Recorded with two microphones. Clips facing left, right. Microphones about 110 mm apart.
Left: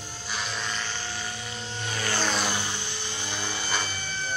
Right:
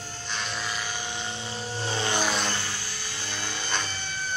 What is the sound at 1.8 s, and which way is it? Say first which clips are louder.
Vehicle: right 3 dB; 25° right (ahead or behind).